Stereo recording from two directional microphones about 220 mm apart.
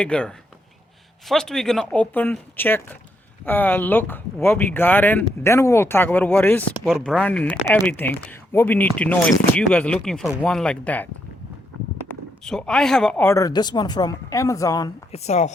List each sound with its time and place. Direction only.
0.0 s speech: 5° left (ahead or behind)
15.1 s a woman's voice: 30° left (ahead or behind)